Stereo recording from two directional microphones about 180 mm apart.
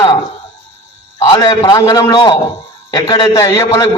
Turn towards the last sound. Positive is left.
turn(degrees=20)  # may be behind; listen again after turning